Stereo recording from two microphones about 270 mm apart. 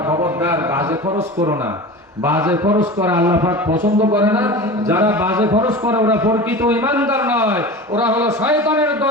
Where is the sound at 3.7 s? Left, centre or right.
Right.